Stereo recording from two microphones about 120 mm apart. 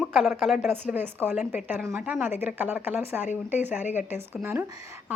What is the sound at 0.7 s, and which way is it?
Speech, 15° right (ahead or behind).